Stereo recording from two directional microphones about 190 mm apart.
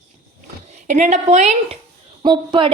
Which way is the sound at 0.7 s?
40° right (ahead or behind).